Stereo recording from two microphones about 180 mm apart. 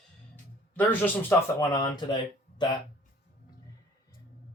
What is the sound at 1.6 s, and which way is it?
Speech, 25° left (ahead or behind).